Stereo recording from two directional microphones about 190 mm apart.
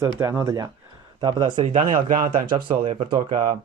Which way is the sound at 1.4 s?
35° right (ahead or behind).